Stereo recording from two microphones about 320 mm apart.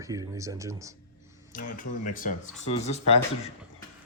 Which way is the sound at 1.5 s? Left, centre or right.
Left.